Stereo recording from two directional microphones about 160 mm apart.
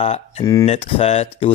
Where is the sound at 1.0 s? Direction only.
40° left (ahead or behind).